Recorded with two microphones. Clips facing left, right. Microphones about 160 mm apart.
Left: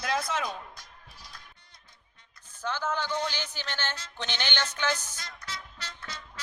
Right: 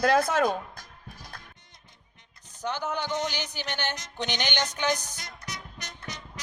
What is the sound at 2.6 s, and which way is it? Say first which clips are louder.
Music: right 1 dB; 15° right (ahead or behind).